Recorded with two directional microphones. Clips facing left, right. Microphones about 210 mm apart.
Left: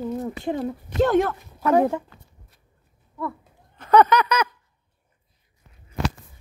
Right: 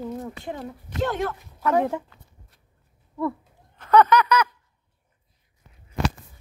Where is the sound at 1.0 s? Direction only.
50° left (ahead or behind).